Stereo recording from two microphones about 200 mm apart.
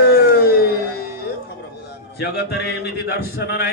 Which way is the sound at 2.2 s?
55° left (ahead or behind).